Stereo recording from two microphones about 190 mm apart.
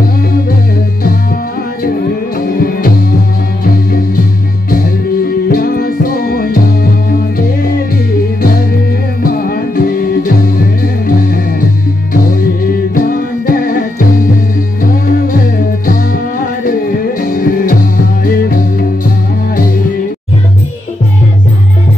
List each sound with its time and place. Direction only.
2.3 s music: 50° left (ahead or behind)
5.2 s music: 50° left (ahead or behind)
9.2 s music: 50° left (ahead or behind)
12.9 s music: 50° left (ahead or behind)
17.2 s music: 50° left (ahead or behind)